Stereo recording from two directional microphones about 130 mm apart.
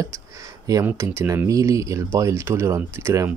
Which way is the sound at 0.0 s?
25° right (ahead or behind).